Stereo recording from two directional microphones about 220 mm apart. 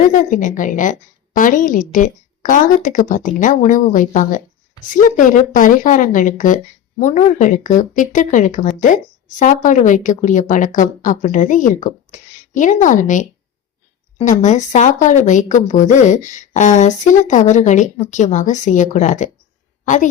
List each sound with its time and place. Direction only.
0.1 s a woman's voice: 35° left (ahead or behind)